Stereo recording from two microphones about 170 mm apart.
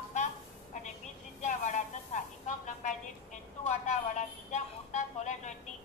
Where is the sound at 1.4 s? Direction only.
45° left (ahead or behind).